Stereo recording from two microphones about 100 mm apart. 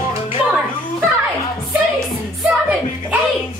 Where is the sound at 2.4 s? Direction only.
5° right (ahead or behind).